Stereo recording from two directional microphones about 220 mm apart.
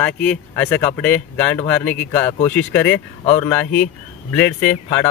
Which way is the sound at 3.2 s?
30° left (ahead or behind).